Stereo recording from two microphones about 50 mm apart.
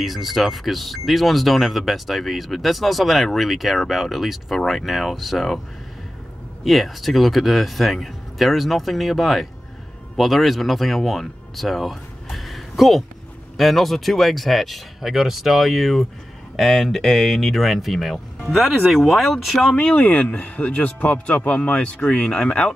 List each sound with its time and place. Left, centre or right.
0.0 s speech: centre
6.6 s speech: centre
19.6 s speech: left